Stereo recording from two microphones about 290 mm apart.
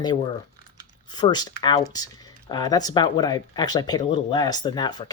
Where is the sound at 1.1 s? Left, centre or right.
Centre.